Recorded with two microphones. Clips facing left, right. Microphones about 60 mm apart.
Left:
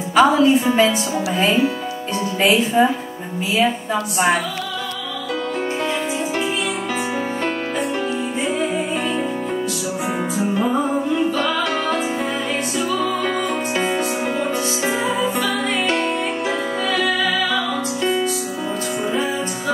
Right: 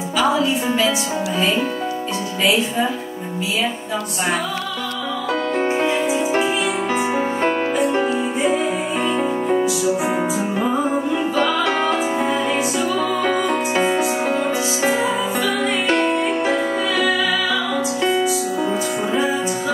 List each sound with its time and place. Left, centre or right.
0.1 s a woman's voice: left
2.4 s a woman's voice: left
5.8 s music: right
10.3 s music: centre
16.1 s music: right